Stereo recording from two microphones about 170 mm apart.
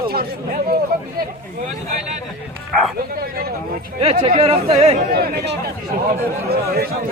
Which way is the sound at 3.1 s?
65° right (ahead or behind).